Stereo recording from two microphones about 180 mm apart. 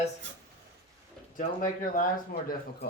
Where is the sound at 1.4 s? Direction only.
50° left (ahead or behind).